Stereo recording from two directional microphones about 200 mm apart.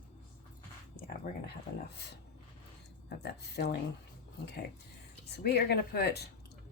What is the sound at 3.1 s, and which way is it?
Speech, 55° left (ahead or behind).